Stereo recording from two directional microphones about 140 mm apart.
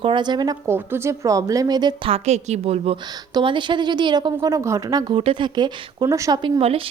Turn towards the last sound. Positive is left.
turn(degrees=-45)  # may be behind; listen again after turning